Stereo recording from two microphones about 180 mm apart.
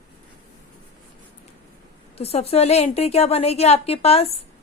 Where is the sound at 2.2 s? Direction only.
35° left (ahead or behind).